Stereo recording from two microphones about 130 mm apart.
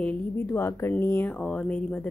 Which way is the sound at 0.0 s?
15° left (ahead or behind).